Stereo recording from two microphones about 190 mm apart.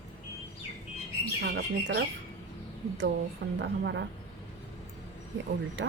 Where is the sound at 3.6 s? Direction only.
65° right (ahead or behind).